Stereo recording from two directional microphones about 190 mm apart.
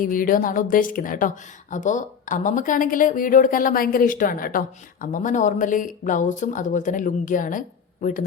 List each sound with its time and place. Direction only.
0.0 s speech: 45° left (ahead or behind)